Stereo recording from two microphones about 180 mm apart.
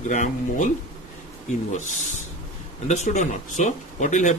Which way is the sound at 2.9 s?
40° left (ahead or behind).